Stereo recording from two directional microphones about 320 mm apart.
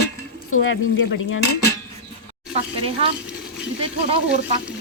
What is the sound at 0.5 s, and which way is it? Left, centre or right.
Dishes, left.